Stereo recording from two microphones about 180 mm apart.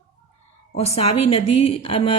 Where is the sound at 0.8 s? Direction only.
35° left (ahead or behind).